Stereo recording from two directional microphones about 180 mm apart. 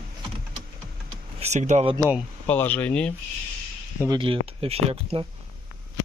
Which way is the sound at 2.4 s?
10° left (ahead or behind).